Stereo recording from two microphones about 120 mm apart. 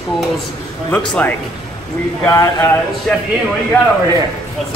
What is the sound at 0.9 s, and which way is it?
Speech, 10° left (ahead or behind).